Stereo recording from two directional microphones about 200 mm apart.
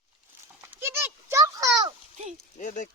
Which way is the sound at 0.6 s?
10° right (ahead or behind).